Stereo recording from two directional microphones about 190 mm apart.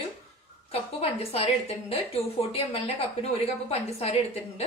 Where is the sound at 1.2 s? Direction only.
30° left (ahead or behind).